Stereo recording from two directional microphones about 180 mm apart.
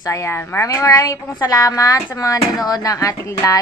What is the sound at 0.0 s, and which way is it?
A woman's voice, 15° left (ahead or behind).